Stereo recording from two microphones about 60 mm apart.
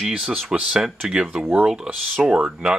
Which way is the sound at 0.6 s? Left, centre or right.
Centre.